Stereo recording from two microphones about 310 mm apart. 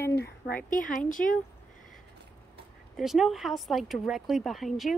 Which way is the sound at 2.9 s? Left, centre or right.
Centre.